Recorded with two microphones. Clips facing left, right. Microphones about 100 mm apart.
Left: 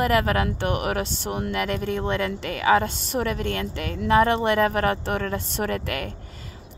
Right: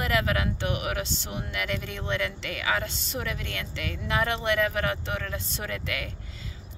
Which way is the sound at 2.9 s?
55° left (ahead or behind).